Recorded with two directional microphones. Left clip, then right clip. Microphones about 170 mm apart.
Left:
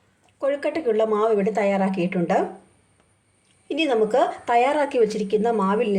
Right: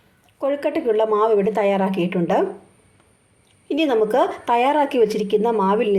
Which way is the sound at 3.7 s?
25° right (ahead or behind).